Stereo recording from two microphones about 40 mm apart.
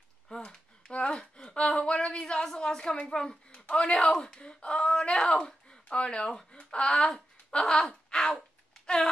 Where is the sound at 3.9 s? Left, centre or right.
Centre.